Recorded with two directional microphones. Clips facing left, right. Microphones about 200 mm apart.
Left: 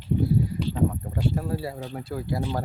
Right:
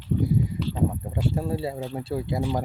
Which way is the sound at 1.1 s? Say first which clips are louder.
Right 1 dB; 25° right (ahead or behind).